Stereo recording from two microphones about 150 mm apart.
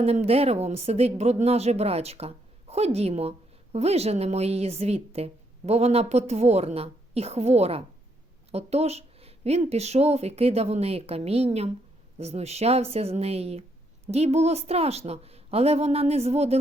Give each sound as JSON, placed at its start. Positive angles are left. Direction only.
{"t": 0.0, "sound": "speech", "side_deg": -45}